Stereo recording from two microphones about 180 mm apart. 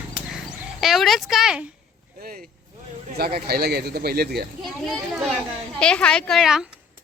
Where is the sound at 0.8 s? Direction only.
Centre (ahead or behind).